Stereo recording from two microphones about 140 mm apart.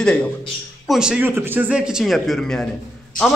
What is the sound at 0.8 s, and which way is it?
Speech, 5° right (ahead or behind).